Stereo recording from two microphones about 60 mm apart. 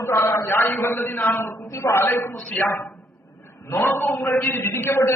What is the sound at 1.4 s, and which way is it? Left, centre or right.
Speech, left.